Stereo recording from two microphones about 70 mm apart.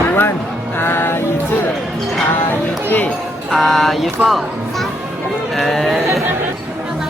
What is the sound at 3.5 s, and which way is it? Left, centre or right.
Music, centre.